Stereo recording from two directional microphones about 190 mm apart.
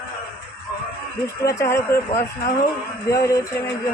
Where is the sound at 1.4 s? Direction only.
15° left (ahead or behind).